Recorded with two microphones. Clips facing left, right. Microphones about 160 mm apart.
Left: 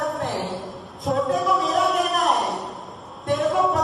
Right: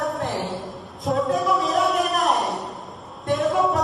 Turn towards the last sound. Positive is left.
turn(degrees=0)  # may be behind; listen again after turning